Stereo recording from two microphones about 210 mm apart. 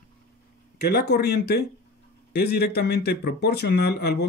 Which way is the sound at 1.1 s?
50° left (ahead or behind).